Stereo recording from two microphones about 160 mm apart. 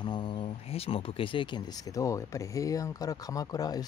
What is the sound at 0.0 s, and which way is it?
Speech, 30° left (ahead or behind).